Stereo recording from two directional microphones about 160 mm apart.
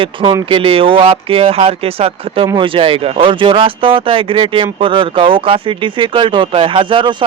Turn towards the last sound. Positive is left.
turn(degrees=-30)  # may be behind; listen again after turning